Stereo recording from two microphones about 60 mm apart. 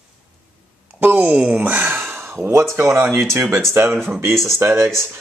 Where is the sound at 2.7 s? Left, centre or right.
Right.